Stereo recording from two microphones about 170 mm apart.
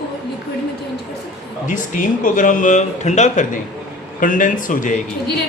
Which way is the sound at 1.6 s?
50° left (ahead or behind).